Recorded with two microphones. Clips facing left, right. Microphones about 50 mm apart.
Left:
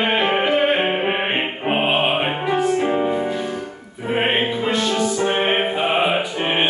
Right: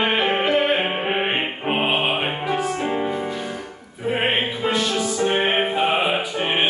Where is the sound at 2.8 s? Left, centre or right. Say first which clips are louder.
Left 4 dB; centre.